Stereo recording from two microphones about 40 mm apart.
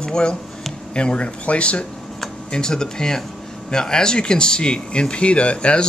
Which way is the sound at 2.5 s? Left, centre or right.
Centre.